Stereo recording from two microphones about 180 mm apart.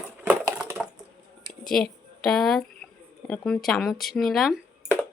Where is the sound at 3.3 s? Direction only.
5° left (ahead or behind).